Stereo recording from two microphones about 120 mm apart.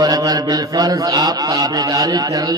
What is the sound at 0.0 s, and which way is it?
A man's voice, 30° right (ahead or behind).